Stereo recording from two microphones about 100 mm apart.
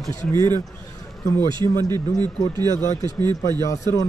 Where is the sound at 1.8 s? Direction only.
40° right (ahead or behind).